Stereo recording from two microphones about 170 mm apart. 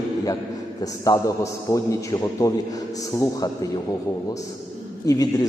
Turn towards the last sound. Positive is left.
turn(degrees=20)  # may be behind; listen again after turning